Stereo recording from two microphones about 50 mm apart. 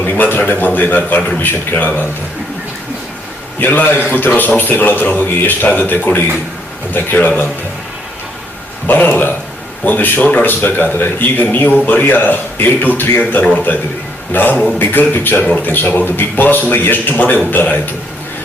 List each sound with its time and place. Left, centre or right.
0.0 s a man's voice: left
3.6 s a man's voice: left
9.0 s a man's voice: left